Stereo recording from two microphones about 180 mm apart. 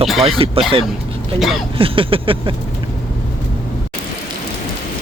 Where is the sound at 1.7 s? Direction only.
30° right (ahead or behind).